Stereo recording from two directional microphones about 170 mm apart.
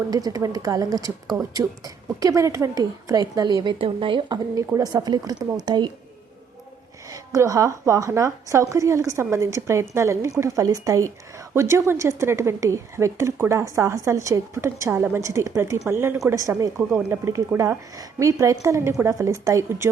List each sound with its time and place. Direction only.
0.1 s a woman's voice: 20° right (ahead or behind)
7.1 s a woman's voice: 20° right (ahead or behind)